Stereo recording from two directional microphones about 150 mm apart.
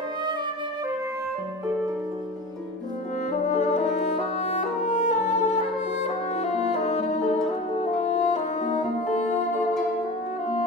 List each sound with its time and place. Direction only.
3.4 s music: 50° left (ahead or behind)